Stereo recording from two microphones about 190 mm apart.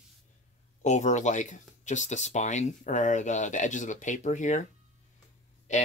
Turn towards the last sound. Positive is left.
turn(degrees=40)  # may be behind; listen again after turning